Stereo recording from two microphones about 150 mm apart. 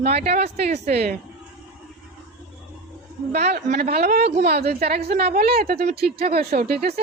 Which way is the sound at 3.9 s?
90° right.